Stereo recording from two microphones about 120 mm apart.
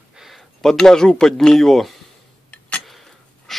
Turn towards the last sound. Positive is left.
turn(degrees=0)  # may be behind; listen again after turning